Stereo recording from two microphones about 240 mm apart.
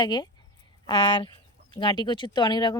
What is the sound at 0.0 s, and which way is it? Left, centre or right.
Speech, centre.